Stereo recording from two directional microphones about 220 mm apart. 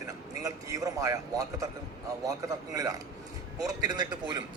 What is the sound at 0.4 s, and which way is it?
A man's voice, 15° right (ahead or behind).